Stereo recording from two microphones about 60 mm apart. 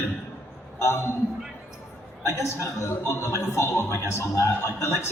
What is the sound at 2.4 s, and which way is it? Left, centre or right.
A man's voice, left.